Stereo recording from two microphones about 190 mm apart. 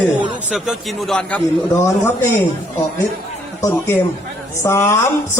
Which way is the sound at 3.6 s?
10° left (ahead or behind).